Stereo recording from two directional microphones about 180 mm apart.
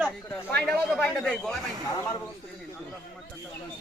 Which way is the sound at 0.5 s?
5° left (ahead or behind).